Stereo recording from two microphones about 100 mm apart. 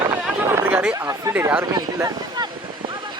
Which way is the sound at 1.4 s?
20° right (ahead or behind).